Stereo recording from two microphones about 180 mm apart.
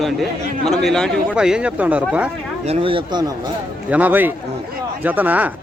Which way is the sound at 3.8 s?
10° right (ahead or behind).